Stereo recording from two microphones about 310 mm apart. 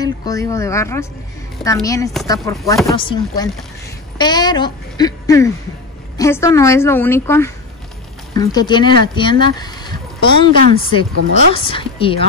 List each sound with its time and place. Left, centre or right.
0.2 s a woman's voice: centre